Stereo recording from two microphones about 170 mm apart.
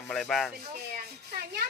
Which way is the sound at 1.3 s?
65° right (ahead or behind).